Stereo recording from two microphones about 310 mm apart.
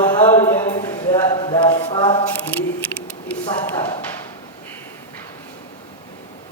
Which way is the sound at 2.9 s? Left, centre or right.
Centre.